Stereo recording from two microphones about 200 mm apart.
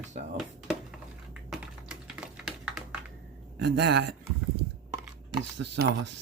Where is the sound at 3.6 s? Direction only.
55° right (ahead or behind).